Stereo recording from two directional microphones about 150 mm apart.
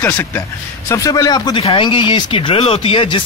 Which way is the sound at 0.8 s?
25° left (ahead or behind).